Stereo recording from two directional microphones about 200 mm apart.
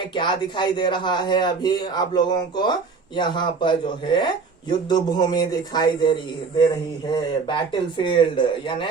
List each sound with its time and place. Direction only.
0.1 s speech: 25° left (ahead or behind)